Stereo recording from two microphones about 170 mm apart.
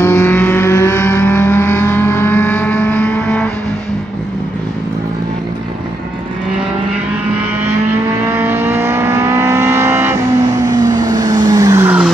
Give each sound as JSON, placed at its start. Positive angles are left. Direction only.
{"t": 0.0, "sound": "vehicle", "side_deg": 15}
{"t": 8.3, "sound": "vehicle", "side_deg": -15}